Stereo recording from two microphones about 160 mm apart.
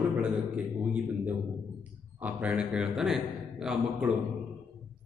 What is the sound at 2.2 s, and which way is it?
A man's voice, 5° right (ahead or behind).